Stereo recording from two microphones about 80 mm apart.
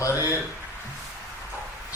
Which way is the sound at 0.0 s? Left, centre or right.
Left.